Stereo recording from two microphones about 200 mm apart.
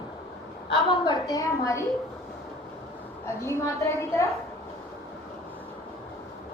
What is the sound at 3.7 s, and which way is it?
Speech, 15° left (ahead or behind).